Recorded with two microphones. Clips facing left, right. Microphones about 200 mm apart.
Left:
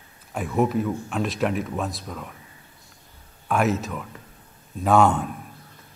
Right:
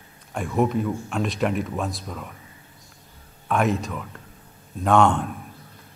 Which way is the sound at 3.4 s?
Centre (ahead or behind).